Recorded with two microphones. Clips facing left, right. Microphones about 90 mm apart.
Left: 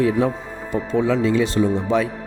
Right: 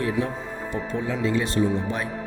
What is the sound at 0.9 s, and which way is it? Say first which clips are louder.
Speech: left 7 dB; 90° left.